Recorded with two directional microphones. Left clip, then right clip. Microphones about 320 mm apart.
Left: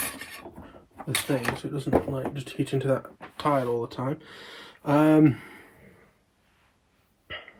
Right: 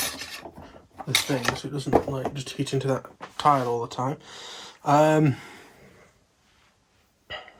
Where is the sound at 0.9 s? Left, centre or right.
Right.